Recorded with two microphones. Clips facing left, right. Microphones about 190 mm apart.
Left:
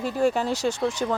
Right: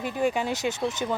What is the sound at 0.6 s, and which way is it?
Speech, 10° right (ahead or behind).